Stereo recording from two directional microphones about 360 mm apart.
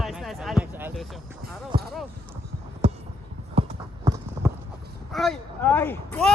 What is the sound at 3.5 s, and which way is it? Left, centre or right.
Clip-clop, centre.